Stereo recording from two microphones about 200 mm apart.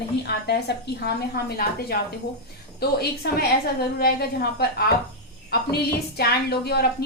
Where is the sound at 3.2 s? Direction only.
55° left (ahead or behind).